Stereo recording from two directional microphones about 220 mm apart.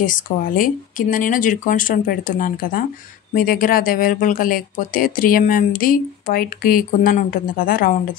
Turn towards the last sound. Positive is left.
turn(degrees=40)  # may be behind; listen again after turning